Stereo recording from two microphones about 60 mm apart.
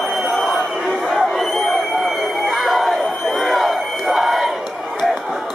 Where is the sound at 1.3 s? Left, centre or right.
Centre.